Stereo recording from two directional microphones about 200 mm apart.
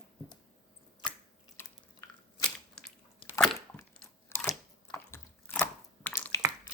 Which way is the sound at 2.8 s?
5° left (ahead or behind).